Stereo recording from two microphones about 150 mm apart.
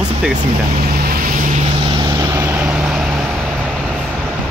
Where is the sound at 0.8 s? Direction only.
90° right; by 1.6 s 65° right (ahead or behind).